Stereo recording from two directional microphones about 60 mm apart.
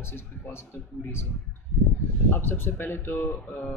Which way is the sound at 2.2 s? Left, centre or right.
Left.